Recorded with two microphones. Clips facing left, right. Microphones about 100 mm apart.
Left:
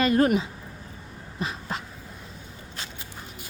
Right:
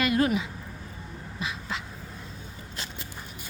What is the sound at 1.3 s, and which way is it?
Duck, 45° left (ahead or behind).